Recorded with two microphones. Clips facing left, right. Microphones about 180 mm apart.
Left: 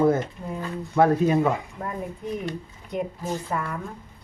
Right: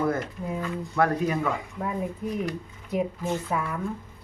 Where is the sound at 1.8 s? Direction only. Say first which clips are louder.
Right 2 dB; centre (ahead or behind).